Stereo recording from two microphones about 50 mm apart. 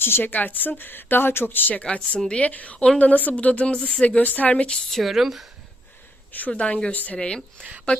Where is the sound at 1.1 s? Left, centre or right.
Left.